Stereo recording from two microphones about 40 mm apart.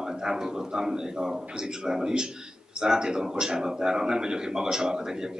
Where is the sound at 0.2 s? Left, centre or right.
Centre.